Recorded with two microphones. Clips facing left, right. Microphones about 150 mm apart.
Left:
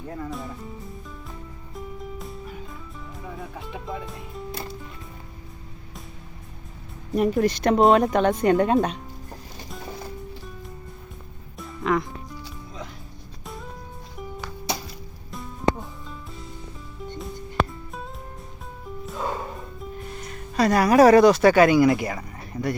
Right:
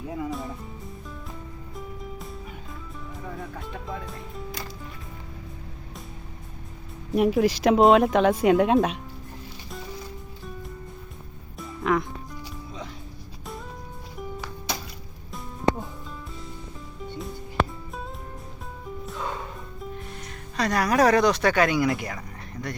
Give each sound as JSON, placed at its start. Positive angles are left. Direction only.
{"t": 0.1, "sound": "a woman's voice", "side_deg": -5}
{"t": 1.7, "sound": "music", "side_deg": 0}
{"t": 3.2, "sound": "speech", "side_deg": 5}
{"t": 7.1, "sound": "a woman's voice", "side_deg": -5}
{"t": 11.5, "sound": "music", "side_deg": 0}
{"t": 15.3, "sound": "music", "side_deg": 0}
{"t": 17.1, "sound": "music", "side_deg": 0}
{"t": 19.1, "sound": "music", "side_deg": 40}
{"t": 20.6, "sound": "a woman's voice", "side_deg": 5}